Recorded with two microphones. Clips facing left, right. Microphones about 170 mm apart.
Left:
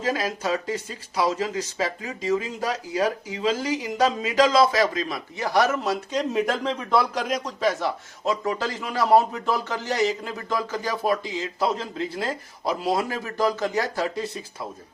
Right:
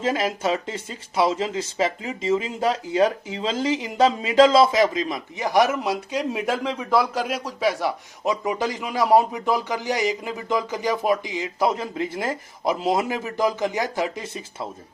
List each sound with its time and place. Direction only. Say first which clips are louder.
0.0 s speech: right 3 dB; 25° right (ahead or behind)